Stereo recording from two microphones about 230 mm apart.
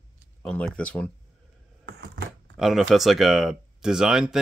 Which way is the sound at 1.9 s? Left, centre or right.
Right.